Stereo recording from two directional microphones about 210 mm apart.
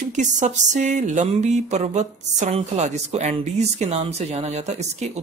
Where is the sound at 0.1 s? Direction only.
35° right (ahead or behind).